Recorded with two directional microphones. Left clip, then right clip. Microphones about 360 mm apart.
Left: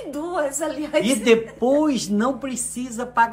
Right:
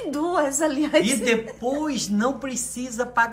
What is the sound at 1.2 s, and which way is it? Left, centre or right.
Speech, centre.